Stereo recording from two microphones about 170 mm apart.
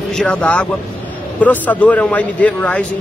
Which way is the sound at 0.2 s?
5° left (ahead or behind).